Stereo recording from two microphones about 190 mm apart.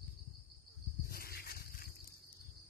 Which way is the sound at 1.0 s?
55° left (ahead or behind).